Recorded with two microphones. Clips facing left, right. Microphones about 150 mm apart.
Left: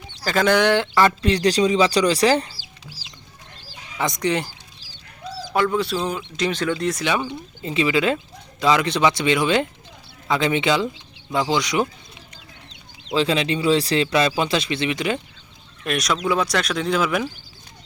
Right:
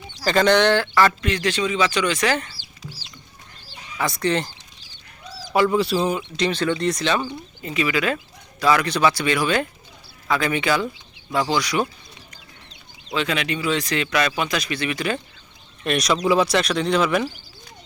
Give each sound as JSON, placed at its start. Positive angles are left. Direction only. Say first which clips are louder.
{"t": 0.3, "sound": "speech", "louder": "right 1 dB", "side_deg": 5}
{"t": 1.2, "sound": "speech", "louder": "left 5 dB", "side_deg": 35}
{"t": 3.9, "sound": "speech", "louder": "even", "side_deg": 20}
{"t": 5.5, "sound": "speech", "louder": "right 2 dB", "side_deg": -5}
{"t": 7.6, "sound": "speech", "louder": "left 3 dB", "side_deg": 25}
{"t": 13.1, "sound": "speech", "louder": "left 4 dB", "side_deg": 30}
{"t": 15.8, "sound": "speech", "louder": "right 2 dB", "side_deg": 0}